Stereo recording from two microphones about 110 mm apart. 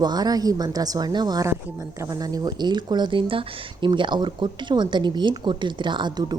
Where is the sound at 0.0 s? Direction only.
35° right (ahead or behind).